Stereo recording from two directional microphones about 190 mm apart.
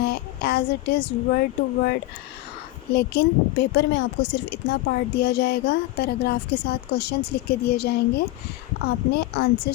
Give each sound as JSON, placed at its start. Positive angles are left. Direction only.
{"t": 0.0, "sound": "a woman's voice", "side_deg": 55}